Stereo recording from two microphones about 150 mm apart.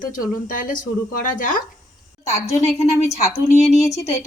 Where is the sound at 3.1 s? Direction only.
20° left (ahead or behind).